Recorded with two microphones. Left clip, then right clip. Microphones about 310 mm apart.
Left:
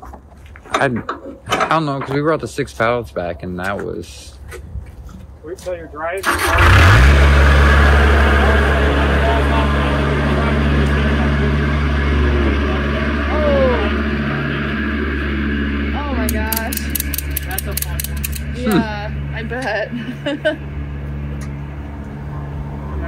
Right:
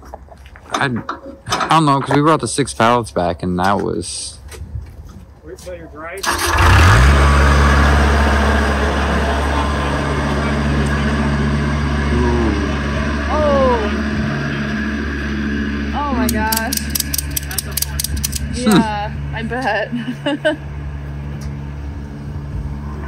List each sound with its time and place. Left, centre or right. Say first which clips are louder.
1.6 s speech: right 5 dB; centre
6.2 s vehicle: left 1 dB; right
18.8 s a sound: right 3 dB; right